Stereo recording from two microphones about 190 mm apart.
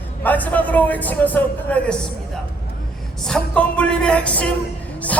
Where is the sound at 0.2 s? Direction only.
10° left (ahead or behind).